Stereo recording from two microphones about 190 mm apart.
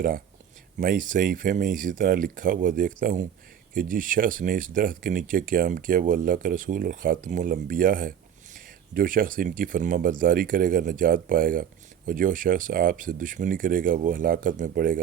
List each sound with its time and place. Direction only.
0.8 s speech: 45° right (ahead or behind)